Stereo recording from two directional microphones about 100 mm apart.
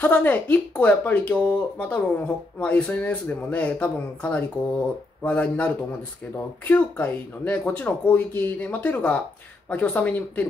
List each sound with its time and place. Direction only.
0.0 s speech: 20° left (ahead or behind)